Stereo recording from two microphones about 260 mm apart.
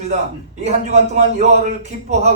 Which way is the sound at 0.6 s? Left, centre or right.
Right.